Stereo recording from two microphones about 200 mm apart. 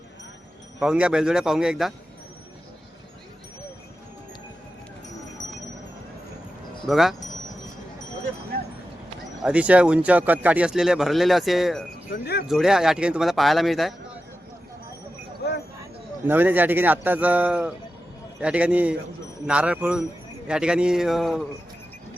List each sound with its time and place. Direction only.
0.8 s speech: 5° right (ahead or behind)
6.8 s speech: centre (ahead or behind)
9.4 s speech: 5° right (ahead or behind)
12.1 s speech: 55° left (ahead or behind)
12.5 s speech: centre (ahead or behind)
16.2 s a man's voice: 10° right (ahead or behind)